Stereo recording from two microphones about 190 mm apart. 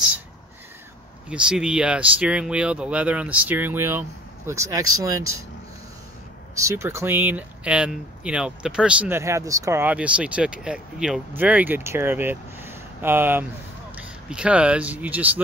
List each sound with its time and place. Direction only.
1.3 s speech: 5° right (ahead or behind)
6.6 s speech: 15° right (ahead or behind)